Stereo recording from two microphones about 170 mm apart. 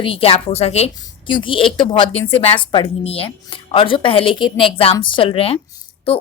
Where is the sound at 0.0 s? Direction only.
35° left (ahead or behind).